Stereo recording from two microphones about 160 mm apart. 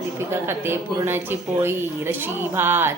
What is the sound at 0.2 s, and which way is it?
Speech, 15° right (ahead or behind).